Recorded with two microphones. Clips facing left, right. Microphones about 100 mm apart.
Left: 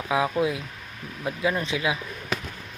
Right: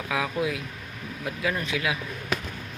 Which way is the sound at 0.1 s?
25° left (ahead or behind).